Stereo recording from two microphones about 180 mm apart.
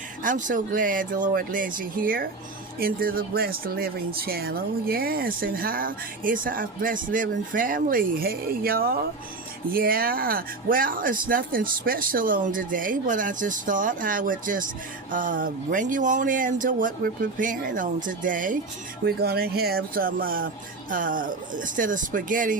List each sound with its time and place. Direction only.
0.2 s speech: 45° right (ahead or behind)
19.0 s speech: 60° right (ahead or behind)